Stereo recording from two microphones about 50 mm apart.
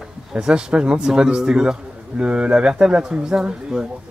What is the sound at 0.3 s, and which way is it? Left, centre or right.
Speech, centre.